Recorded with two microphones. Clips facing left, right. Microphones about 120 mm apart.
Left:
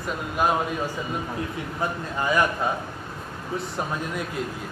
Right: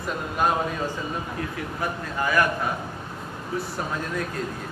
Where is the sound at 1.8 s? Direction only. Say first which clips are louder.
Left 1 dB; 20° left (ahead or behind).